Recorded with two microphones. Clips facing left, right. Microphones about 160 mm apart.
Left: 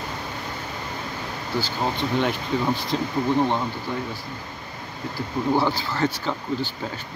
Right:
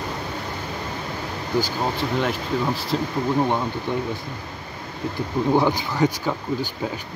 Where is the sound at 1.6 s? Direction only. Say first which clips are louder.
Right 1 dB; centre (ahead or behind).